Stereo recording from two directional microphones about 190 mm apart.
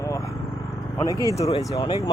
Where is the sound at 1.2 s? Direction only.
15° left (ahead or behind).